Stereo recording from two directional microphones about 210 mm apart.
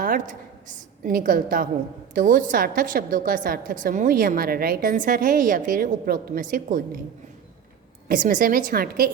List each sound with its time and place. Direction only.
0.0 s a woman's voice: 40° right (ahead or behind)
8.0 s a woman's voice: 40° right (ahead or behind)